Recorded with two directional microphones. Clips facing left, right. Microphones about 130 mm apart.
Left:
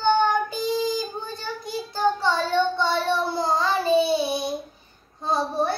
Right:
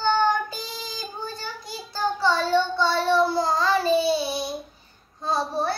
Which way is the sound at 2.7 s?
20° left (ahead or behind).